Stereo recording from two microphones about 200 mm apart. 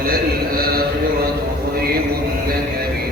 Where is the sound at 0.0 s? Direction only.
45° right (ahead or behind).